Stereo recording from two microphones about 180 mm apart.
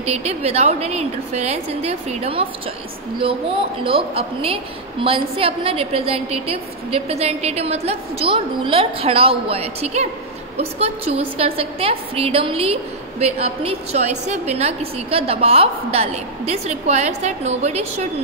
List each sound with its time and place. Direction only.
0.0 s a woman's voice: 35° right (ahead or behind)
3.8 s a woman's voice: 30° right (ahead or behind)